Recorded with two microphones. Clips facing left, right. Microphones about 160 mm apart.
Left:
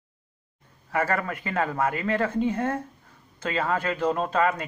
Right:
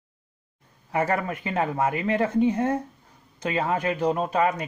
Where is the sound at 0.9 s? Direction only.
20° right (ahead or behind).